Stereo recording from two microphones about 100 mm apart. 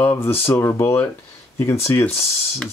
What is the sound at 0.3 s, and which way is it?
Speech, 25° left (ahead or behind).